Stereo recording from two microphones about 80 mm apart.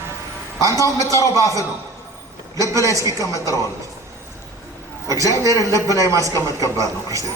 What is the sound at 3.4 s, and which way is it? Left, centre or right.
Speech, left.